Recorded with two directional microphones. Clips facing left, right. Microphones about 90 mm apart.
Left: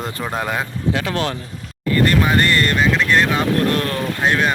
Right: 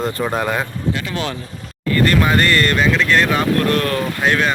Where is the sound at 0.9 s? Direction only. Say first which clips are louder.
Left 4 dB; 90° left.